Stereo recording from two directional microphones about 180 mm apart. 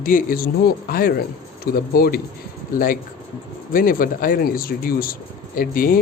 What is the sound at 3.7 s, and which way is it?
Speech, 50° left (ahead or behind).